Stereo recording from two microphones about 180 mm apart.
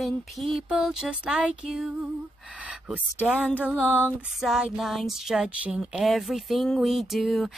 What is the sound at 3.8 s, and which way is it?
Music, 10° left (ahead or behind).